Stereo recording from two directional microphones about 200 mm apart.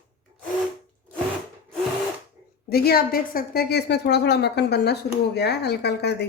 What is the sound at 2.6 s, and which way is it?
A woman's voice, 50° left (ahead or behind).